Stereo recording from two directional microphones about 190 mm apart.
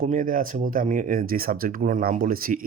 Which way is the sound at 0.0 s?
45° right (ahead or behind).